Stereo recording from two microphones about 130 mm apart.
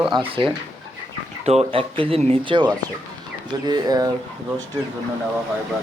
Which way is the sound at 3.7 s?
30° right (ahead or behind).